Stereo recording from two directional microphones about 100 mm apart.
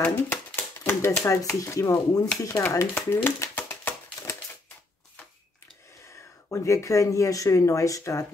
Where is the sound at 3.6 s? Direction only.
25° left (ahead or behind).